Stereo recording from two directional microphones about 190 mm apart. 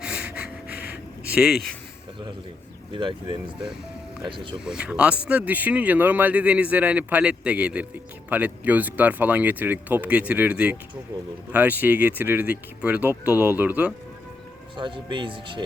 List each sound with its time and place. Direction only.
0.0 s breathing: 5° right (ahead or behind)
1.3 s speech: 5° right (ahead or behind)
2.9 s speech: 25° right (ahead or behind)
4.2 s speech: 25° right (ahead or behind)
4.6 s a man's voice: 5° right (ahead or behind)
14.8 s speech: 25° right (ahead or behind)